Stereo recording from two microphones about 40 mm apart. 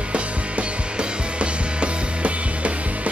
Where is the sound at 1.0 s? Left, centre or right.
Right.